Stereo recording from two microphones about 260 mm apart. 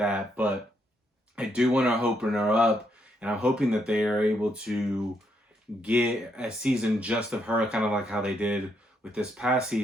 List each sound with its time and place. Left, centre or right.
0.0 s speech: centre